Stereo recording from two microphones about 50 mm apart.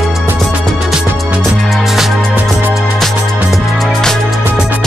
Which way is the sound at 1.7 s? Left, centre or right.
Centre.